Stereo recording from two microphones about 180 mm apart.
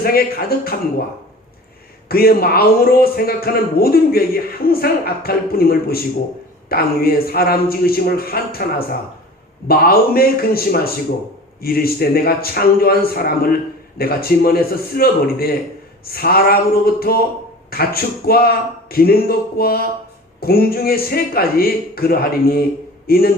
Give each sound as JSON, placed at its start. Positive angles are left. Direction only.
{"t": 0.0, "sound": "a man's voice", "side_deg": 55}
{"t": 2.0, "sound": "a man's voice", "side_deg": 55}